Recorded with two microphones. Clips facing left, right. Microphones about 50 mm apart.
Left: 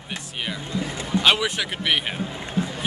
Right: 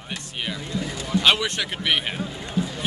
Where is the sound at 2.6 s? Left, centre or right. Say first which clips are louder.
Even; left.